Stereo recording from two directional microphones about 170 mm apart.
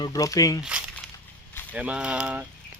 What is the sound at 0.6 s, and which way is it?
Speech, 5° right (ahead or behind).